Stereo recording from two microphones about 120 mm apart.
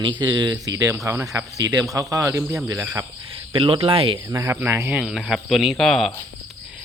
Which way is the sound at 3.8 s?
50° right (ahead or behind).